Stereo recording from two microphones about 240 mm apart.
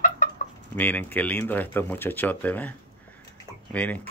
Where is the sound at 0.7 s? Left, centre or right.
Centre.